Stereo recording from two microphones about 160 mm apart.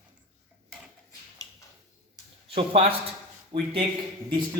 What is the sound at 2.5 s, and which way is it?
A man's voice, 40° right (ahead or behind).